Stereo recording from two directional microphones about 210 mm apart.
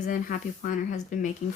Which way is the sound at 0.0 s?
40° left (ahead or behind).